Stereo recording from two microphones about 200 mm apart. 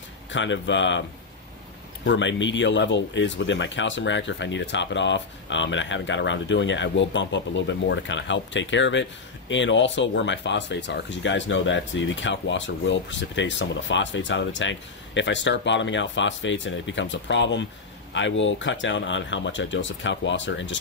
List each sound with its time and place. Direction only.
0.3 s speech: 65° left (ahead or behind)
2.0 s speech: 65° left (ahead or behind)